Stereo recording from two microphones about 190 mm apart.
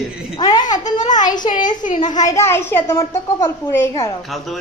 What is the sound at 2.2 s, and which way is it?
A woman's voice, 15° left (ahead or behind).